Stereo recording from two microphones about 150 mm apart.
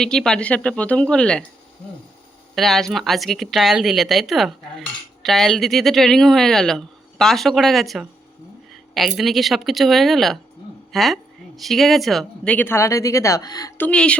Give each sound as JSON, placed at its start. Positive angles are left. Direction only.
{"t": 0.0, "sound": "speech", "side_deg": 5}
{"t": 2.6, "sound": "speech", "side_deg": 0}
{"t": 12.5, "sound": "speech", "side_deg": 15}
{"t": 13.7, "sound": "speech", "side_deg": 10}